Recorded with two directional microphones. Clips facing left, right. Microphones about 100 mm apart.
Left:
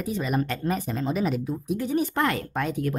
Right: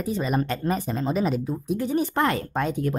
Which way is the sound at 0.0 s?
30° right (ahead or behind).